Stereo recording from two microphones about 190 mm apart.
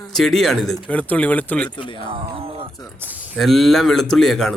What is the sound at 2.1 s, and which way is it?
Speech, 30° right (ahead or behind).